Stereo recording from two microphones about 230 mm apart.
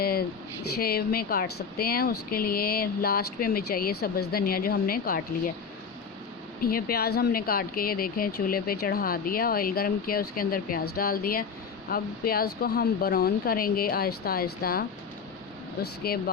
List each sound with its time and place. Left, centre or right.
0.0 s a sound: left
0.8 s speech: left
6.6 s speech: left